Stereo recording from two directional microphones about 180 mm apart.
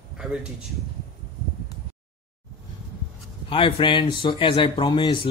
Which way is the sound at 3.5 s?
25° left (ahead or behind).